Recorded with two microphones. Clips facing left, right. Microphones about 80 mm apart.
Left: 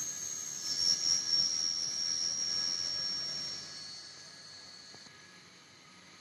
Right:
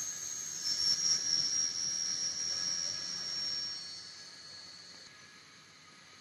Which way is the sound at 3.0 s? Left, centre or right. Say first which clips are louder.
Left 1 dB; right.